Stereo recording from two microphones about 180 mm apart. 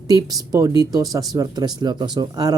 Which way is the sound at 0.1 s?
20° right (ahead or behind).